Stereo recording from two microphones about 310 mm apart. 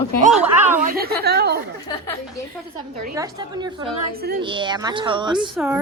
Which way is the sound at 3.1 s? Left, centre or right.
Centre.